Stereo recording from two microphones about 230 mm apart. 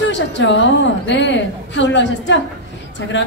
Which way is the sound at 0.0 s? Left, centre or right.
Left.